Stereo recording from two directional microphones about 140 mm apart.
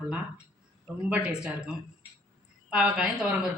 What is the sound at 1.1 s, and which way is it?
Speech, 10° right (ahead or behind).